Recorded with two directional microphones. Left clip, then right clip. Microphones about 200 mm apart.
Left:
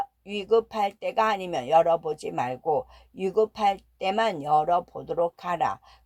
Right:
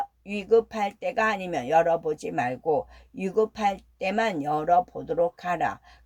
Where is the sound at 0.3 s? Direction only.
10° left (ahead or behind).